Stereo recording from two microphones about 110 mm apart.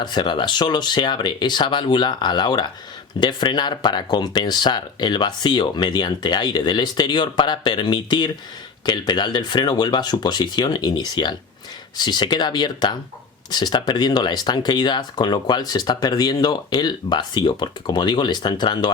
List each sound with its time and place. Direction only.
0.0 s speech: 40° left (ahead or behind)